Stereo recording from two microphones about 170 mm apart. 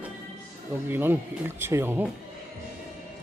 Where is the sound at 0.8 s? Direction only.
10° right (ahead or behind).